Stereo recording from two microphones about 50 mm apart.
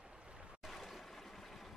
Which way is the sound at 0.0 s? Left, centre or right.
Centre.